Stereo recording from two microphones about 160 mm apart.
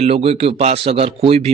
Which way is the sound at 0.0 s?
40° right (ahead or behind).